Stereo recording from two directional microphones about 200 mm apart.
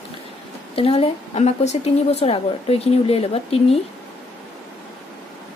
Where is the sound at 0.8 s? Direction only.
30° left (ahead or behind).